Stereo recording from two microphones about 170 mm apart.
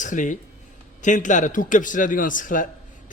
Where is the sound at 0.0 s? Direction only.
50° left (ahead or behind).